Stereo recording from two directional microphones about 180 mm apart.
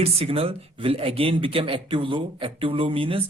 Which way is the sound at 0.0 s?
35° right (ahead or behind).